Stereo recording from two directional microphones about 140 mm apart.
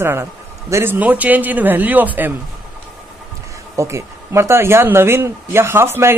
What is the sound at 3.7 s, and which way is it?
Speech, 20° right (ahead or behind).